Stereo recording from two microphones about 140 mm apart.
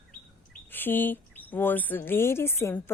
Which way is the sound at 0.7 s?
15° left (ahead or behind).